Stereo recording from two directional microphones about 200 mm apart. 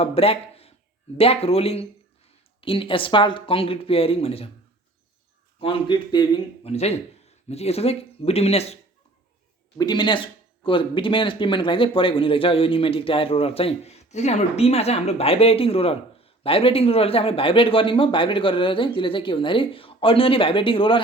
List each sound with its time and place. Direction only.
0.0 s speech: 30° left (ahead or behind)
5.5 s speech: 25° left (ahead or behind)
9.7 s speech: 20° left (ahead or behind)